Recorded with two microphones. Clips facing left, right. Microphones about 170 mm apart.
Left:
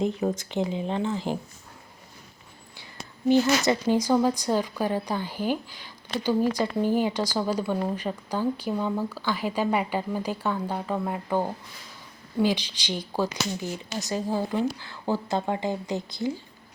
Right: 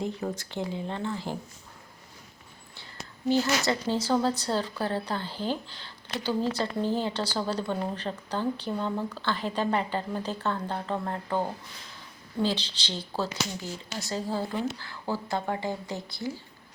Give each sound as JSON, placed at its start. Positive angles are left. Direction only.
{"t": 0.0, "sound": "speech", "side_deg": 20}
{"t": 2.7, "sound": "a sound", "side_deg": 15}
{"t": 3.7, "sound": "speech", "side_deg": 15}